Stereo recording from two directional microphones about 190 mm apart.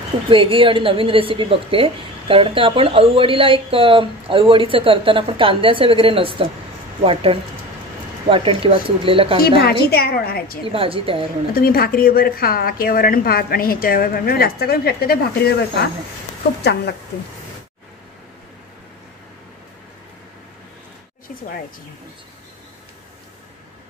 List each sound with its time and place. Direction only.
0.3 s a woman's voice: 25° right (ahead or behind)
9.6 s a woman's voice: 55° left (ahead or behind)
10.6 s a woman's voice: 30° right (ahead or behind)
11.5 s a woman's voice: 50° left (ahead or behind)